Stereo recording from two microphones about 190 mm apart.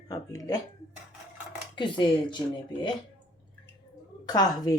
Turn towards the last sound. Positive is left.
turn(degrees=20)  # may be behind; listen again after turning